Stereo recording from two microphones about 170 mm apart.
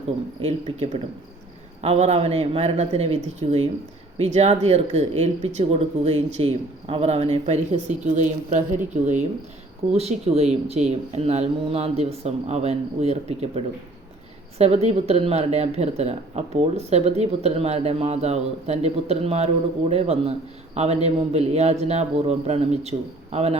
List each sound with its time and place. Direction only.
0.4 s speech: 35° right (ahead or behind)